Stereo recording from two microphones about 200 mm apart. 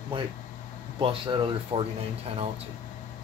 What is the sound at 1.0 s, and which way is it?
Speech, 25° right (ahead or behind).